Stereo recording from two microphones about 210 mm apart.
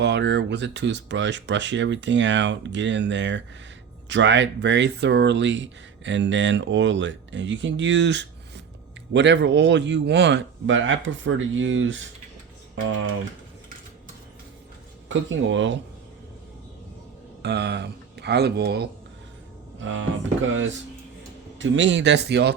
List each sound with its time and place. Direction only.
0.0 s speech: 55° right (ahead or behind)
15.1 s speech: 65° right (ahead or behind)
17.4 s speech: 55° right (ahead or behind)
19.8 s speech: 65° right (ahead or behind)
21.6 s speech: 60° right (ahead or behind)